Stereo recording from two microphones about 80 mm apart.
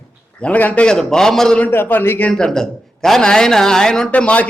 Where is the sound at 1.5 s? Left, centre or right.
Left.